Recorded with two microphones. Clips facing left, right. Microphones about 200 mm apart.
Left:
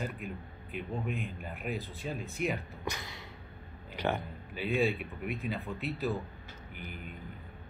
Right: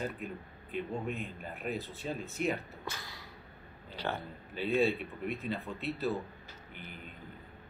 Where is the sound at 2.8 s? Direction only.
20° left (ahead or behind).